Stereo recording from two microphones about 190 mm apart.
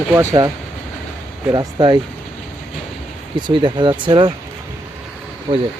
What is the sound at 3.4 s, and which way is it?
Speech, 25° right (ahead or behind).